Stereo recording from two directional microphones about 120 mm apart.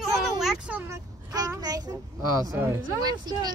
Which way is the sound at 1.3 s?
30° right (ahead or behind).